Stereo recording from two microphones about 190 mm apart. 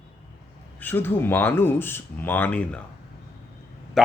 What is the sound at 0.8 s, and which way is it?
Speech, 10° left (ahead or behind).